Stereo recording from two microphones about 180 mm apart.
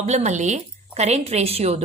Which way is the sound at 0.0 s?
40° right (ahead or behind).